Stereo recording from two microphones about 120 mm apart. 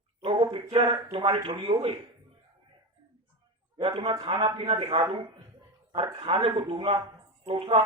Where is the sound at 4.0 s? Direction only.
55° right (ahead or behind).